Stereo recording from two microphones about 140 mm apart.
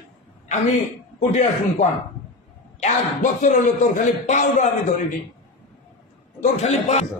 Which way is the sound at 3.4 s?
65° left (ahead or behind).